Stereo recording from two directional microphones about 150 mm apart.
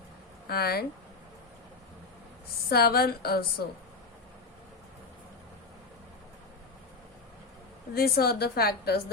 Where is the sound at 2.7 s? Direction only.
90° left.